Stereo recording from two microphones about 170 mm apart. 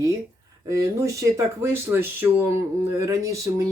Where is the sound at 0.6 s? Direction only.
15° right (ahead or behind).